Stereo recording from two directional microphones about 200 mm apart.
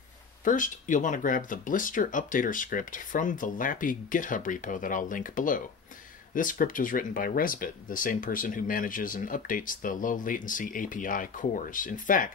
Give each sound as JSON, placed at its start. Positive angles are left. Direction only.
{"t": 0.4, "sound": "speech", "side_deg": 40}